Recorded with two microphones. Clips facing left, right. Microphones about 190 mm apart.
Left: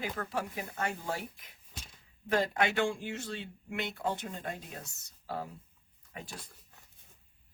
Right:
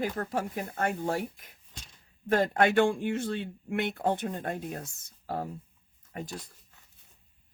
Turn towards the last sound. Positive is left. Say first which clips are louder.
# right 7 dB
turn(degrees=-45)  # may be behind; listen again after turning